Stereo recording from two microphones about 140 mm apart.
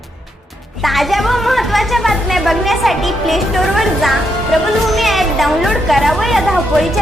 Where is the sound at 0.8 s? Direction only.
Centre (ahead or behind).